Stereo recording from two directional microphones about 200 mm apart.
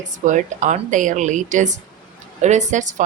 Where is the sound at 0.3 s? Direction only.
40° right (ahead or behind).